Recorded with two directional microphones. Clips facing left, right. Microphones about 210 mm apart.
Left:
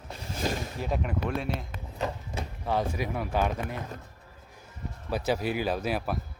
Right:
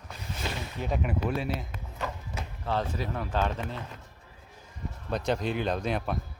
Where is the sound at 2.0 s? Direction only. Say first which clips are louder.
Left 4 dB; 30° left (ahead or behind).